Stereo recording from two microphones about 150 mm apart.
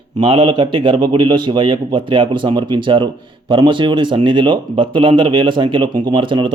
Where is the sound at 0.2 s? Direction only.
35° right (ahead or behind).